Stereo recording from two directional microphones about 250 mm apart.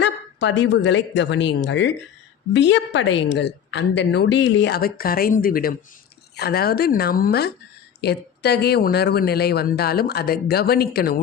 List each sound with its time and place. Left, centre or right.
0.0 s a woman's voice: left